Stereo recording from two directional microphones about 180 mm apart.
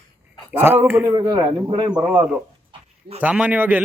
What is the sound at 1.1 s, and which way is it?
Speech, 20° right (ahead or behind).